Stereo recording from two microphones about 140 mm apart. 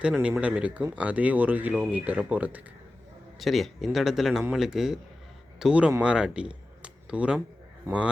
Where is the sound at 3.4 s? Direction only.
Centre (ahead or behind).